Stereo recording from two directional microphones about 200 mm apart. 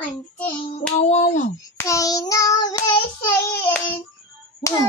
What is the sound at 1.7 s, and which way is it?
Child singing, 15° left (ahead or behind).